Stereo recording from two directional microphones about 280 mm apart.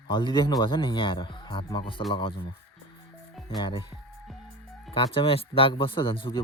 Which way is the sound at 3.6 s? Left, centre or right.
Centre.